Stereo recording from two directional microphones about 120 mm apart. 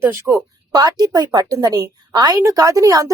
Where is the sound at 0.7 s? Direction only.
30° right (ahead or behind).